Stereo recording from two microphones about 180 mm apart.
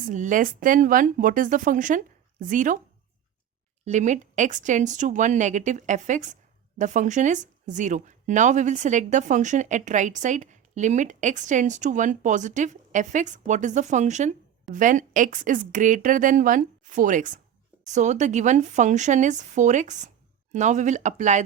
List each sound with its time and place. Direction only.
0.1 s speech: 45° right (ahead or behind)
3.8 s speech: 40° right (ahead or behind)